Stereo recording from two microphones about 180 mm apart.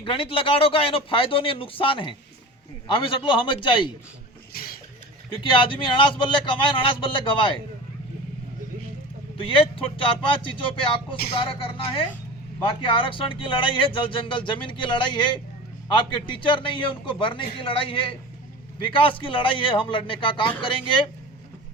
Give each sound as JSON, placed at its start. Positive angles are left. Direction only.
{"t": 0.0, "sound": "speech", "side_deg": 30}
{"t": 4.5, "sound": "a sound", "side_deg": 55}
{"t": 5.4, "sound": "speech", "side_deg": 30}
{"t": 9.4, "sound": "speech", "side_deg": 30}